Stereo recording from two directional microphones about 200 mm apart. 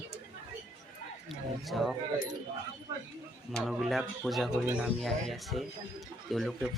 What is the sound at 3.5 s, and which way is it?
Speech, centre (ahead or behind).